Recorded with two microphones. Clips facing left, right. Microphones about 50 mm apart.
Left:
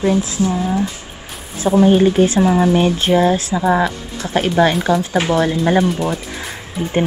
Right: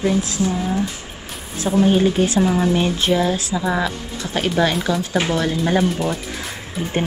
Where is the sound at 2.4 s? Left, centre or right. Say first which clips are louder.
Left 4 dB; centre.